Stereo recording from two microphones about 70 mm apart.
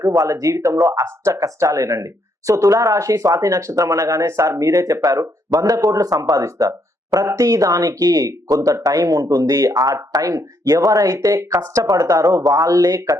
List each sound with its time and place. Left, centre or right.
0.0 s speech: right